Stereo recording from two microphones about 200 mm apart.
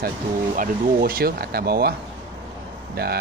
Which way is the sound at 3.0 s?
50° right (ahead or behind).